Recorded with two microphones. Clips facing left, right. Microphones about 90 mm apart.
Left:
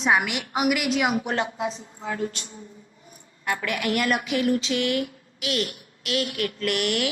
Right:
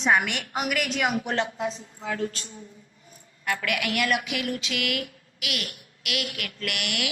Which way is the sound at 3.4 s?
20° left (ahead or behind).